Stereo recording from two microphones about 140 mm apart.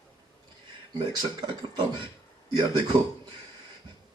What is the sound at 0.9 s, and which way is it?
A man's voice, 35° right (ahead or behind).